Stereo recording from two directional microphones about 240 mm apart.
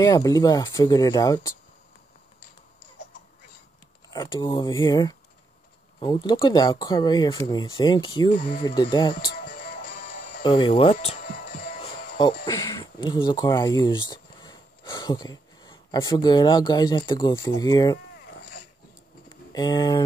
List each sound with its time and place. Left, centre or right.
0.0 s speech: centre
4.1 s speech: centre
9.3 s music: left
10.4 s music: left
12.4 s speech: centre
19.2 s a sound: centre